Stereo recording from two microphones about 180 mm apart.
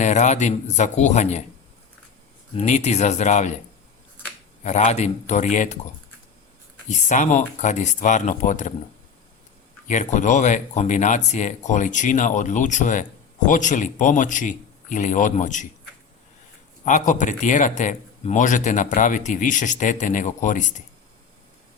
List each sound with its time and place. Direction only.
0.0 s speech: 40° left (ahead or behind)
2.6 s speech: 40° left (ahead or behind)
4.6 s speech: 40° left (ahead or behind)
6.8 s speech: 40° left (ahead or behind)
9.8 s speech: 40° left (ahead or behind)
16.8 s speech: 45° left (ahead or behind)